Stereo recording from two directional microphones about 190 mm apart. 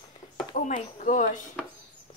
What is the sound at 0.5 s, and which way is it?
Speech, 45° left (ahead or behind).